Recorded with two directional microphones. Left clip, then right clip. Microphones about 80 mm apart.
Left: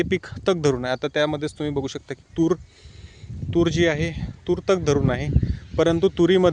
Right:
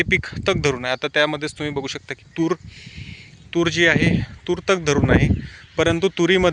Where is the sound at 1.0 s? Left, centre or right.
Left.